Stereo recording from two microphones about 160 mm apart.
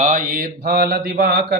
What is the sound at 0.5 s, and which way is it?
Mantra, 90° right.